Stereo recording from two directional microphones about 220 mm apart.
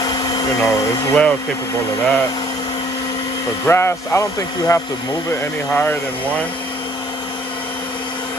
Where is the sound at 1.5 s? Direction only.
15° left (ahead or behind).